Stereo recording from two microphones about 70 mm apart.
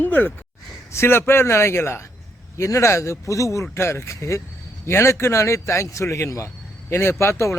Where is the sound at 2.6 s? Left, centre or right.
Left.